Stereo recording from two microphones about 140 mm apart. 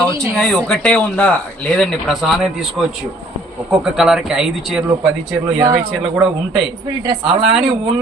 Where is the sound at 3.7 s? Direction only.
5° right (ahead or behind).